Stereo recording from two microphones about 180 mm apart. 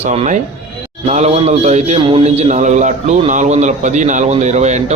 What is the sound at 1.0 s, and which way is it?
A man's voice, 40° right (ahead or behind).